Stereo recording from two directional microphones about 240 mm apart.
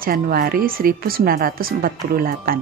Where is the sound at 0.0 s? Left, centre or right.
Right.